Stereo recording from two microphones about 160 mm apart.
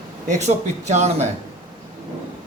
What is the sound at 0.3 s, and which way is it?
A man's voice, 45° right (ahead or behind).